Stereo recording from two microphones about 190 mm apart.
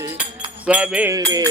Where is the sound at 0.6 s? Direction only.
5° right (ahead or behind).